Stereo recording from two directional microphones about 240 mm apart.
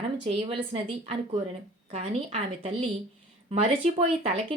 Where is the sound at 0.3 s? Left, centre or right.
Right.